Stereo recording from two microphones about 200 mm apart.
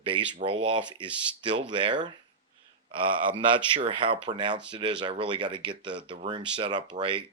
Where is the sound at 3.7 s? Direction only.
25° right (ahead or behind).